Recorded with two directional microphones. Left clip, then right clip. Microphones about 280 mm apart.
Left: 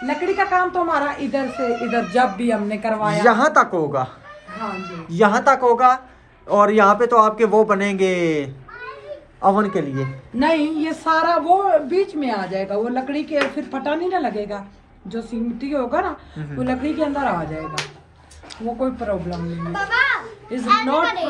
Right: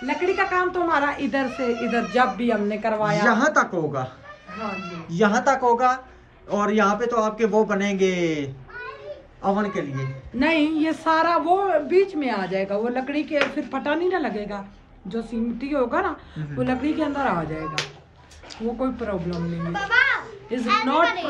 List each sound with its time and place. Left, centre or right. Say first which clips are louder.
0.0 s a sound: left 2 dB; centre
0.7 s a woman's voice: left 2 dB; centre
2.0 s speech: left 2 dB; left
2.7 s speech: left 2 dB; left
3.2 s a man's voice: left 6 dB; centre
5.1 s a man's voice: left 5 dB; centre
18.8 s a woman's voice: left 6 dB; centre